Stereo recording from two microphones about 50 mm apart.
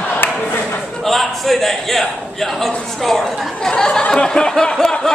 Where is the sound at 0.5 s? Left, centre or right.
Left.